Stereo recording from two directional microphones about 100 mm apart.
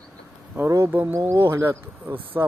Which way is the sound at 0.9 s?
15° right (ahead or behind).